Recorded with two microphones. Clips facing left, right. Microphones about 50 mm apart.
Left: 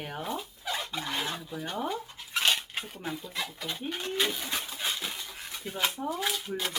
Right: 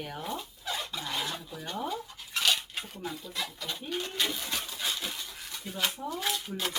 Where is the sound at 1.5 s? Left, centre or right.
Centre.